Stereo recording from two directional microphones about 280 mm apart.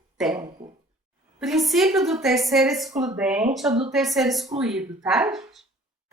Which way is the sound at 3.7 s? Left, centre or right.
Centre.